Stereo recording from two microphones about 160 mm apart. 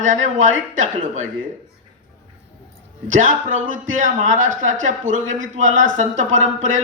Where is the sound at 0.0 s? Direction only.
50° right (ahead or behind).